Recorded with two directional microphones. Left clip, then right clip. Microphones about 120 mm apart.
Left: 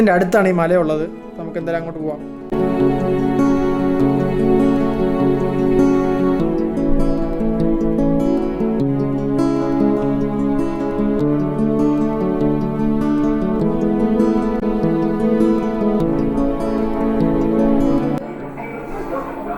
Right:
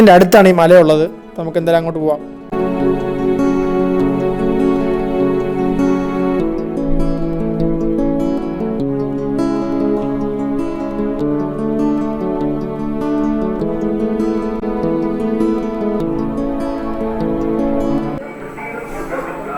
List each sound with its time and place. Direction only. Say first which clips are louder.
0.0 s a man's voice: right 8 dB; 50° right (ahead or behind)
3.3 s music: right 2 dB; centre (ahead or behind)
7.6 s music: right 1 dB; centre (ahead or behind)
11.2 s music: even; centre (ahead or behind)